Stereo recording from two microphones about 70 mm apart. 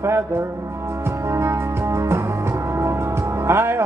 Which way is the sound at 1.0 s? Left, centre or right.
Right.